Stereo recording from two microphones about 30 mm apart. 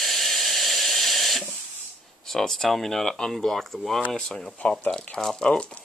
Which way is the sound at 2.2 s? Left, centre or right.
Centre.